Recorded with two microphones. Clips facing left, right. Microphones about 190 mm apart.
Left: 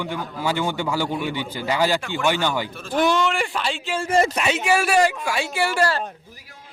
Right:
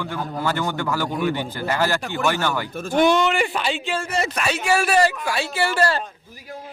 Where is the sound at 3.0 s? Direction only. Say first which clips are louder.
Right 2 dB; centre (ahead or behind).